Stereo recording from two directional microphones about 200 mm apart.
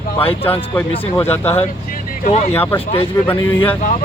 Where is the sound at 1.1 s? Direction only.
10° left (ahead or behind).